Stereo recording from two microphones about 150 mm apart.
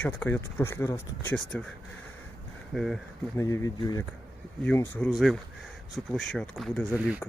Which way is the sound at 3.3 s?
20° left (ahead or behind).